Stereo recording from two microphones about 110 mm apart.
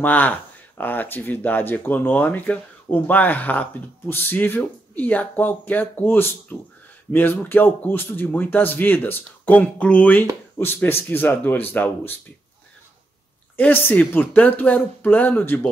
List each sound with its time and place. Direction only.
0.0 s speech: 15° left (ahead or behind)
13.6 s speech: 20° left (ahead or behind)